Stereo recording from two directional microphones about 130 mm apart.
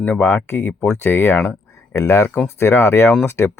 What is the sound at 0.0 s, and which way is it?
Speech, 10° left (ahead or behind).